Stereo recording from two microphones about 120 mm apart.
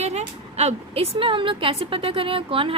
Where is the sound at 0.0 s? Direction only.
65° right (ahead or behind).